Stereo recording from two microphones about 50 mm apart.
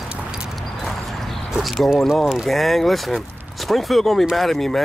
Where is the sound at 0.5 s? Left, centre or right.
Centre.